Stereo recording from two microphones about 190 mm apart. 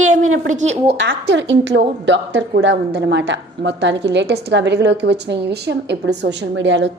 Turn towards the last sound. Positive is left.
turn(degrees=-75)  # may be behind; listen again after turning